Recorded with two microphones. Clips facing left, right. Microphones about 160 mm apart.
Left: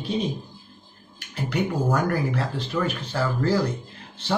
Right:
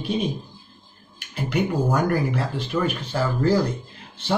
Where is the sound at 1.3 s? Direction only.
15° right (ahead or behind).